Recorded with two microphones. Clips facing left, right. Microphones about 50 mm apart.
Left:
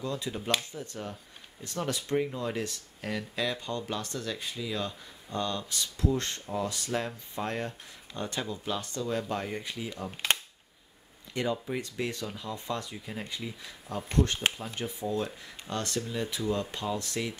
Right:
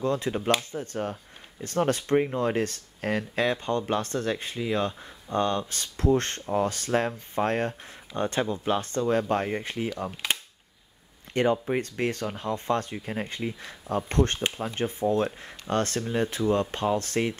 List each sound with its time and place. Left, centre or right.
0.0 s speech: right
11.3 s speech: right